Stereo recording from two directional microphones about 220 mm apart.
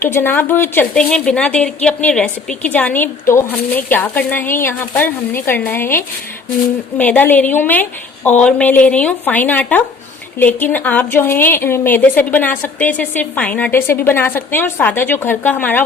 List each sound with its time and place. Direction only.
0.0 s a woman's voice: 10° left (ahead or behind)